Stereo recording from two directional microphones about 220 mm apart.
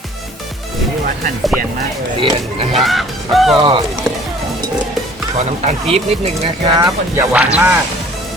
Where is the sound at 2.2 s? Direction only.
25° right (ahead or behind).